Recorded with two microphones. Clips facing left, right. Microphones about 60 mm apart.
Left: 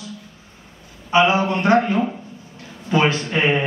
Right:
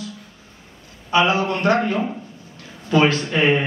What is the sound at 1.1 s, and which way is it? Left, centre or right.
A man's voice, left.